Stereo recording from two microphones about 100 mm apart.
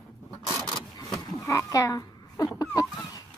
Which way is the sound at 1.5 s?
35° left (ahead or behind).